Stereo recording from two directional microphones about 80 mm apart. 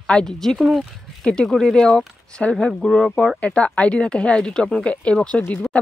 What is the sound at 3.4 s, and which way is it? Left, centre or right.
Speech, centre.